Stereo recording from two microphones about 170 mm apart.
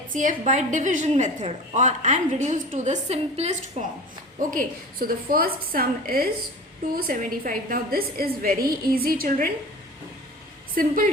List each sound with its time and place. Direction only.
0.1 s a woman's voice: 50° right (ahead or behind)
4.4 s a woman's voice: 55° right (ahead or behind)
10.8 s a woman's voice: 55° right (ahead or behind)